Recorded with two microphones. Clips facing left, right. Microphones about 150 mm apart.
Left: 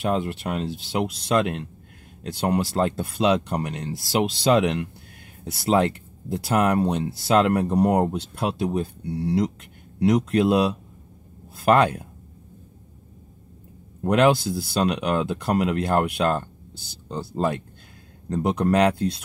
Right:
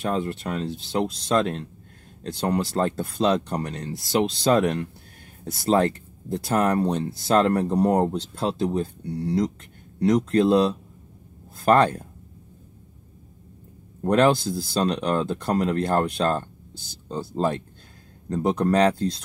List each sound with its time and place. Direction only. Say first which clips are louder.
0.1 s speech: left 1 dB; 15° left (ahead or behind)
14.0 s speech: even; 10° left (ahead or behind)